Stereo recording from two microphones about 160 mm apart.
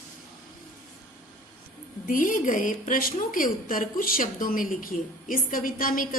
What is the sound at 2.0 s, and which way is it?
A woman's voice, 55° left (ahead or behind).